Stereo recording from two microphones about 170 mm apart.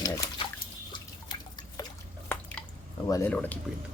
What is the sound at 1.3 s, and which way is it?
Drip, 25° left (ahead or behind).